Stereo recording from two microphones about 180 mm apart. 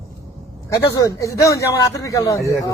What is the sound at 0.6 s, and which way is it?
A man's voice, 20° left (ahead or behind).